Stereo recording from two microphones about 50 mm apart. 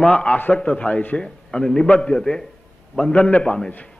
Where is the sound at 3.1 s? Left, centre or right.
Left.